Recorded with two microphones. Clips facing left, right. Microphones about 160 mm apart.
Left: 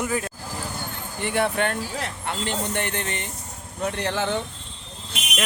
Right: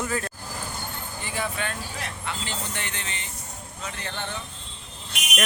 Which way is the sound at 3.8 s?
70° left (ahead or behind).